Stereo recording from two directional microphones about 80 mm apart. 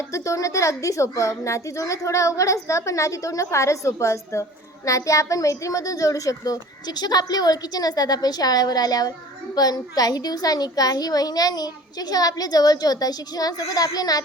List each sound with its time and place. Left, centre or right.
0.0 s a child's voice: left